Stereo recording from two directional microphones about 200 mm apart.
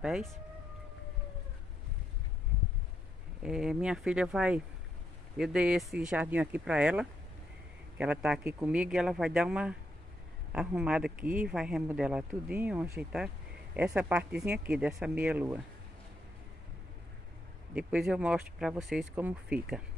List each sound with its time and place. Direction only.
0.0 s speech: centre (ahead or behind)
3.4 s speech: 5° right (ahead or behind)
17.7 s speech: 5° right (ahead or behind)